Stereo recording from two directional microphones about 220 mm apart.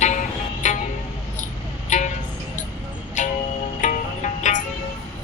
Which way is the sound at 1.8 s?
35° left (ahead or behind).